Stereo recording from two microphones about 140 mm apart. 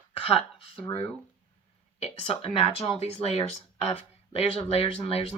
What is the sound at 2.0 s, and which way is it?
Speech, 45° left (ahead or behind).